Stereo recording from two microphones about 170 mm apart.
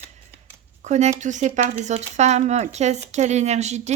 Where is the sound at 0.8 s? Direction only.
40° right (ahead or behind).